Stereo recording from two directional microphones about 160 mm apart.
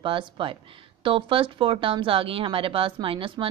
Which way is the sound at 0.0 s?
30° right (ahead or behind).